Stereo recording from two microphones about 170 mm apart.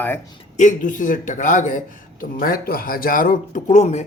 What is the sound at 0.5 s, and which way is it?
A man's voice, 45° left (ahead or behind).